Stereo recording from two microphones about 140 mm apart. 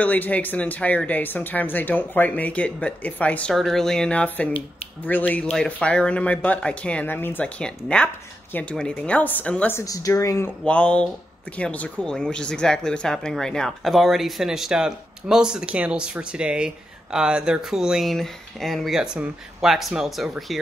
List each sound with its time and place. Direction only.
0.0 s speech: 10° left (ahead or behind)
10.6 s speech: 10° left (ahead or behind)